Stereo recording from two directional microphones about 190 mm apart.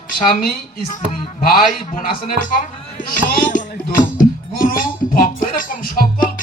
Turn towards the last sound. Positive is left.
turn(degrees=50)  # may be behind; listen again after turning